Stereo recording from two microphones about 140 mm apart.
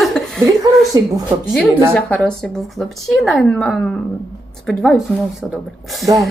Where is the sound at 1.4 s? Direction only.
5° left (ahead or behind).